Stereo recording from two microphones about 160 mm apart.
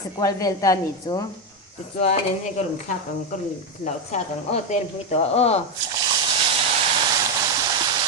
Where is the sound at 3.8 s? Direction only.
50° left (ahead or behind).